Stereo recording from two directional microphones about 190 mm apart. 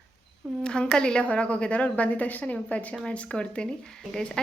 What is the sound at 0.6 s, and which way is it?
A woman's voice, 5° left (ahead or behind).